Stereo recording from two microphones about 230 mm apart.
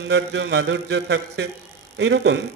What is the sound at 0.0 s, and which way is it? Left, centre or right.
Speech, right.